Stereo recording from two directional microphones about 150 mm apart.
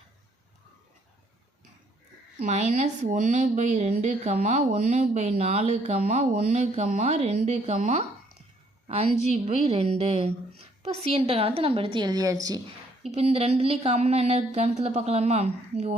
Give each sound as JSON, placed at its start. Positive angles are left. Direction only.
{"t": 2.4, "sound": "speech", "side_deg": -55}
{"t": 9.3, "sound": "a woman's voice", "side_deg": -45}
{"t": 13.0, "sound": "speech", "side_deg": -45}